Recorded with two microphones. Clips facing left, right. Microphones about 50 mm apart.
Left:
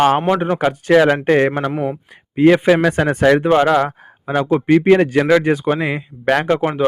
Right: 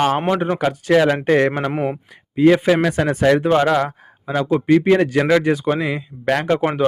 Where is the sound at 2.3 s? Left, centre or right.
Left.